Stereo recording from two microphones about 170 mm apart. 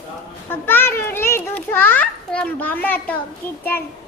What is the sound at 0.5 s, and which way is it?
Children playing, 10° left (ahead or behind).